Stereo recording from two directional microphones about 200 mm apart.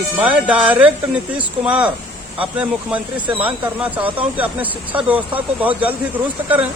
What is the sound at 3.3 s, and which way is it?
Speech, 25° right (ahead or behind).